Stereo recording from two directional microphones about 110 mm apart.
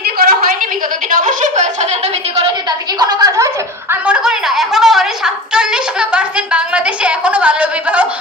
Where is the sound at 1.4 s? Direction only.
90° right; by 2.5 s 75° right (ahead or behind).